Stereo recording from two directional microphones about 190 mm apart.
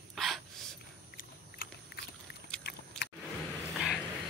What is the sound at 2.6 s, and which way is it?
Biting, 60° left (ahead or behind).